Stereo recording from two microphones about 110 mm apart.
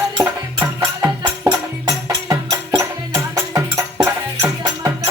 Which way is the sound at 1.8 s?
30° right (ahead or behind).